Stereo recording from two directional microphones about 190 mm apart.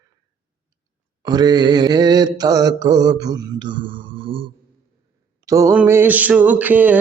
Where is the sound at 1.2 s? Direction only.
20° right (ahead or behind).